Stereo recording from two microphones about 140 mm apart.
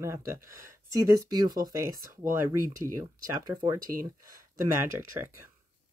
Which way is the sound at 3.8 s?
85° right.